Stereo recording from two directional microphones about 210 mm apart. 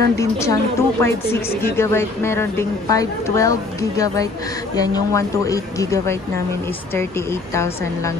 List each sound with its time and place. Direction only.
0.1 s speech: 15° left (ahead or behind)